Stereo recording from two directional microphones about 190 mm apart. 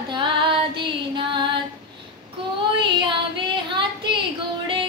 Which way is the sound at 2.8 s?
25° right (ahead or behind).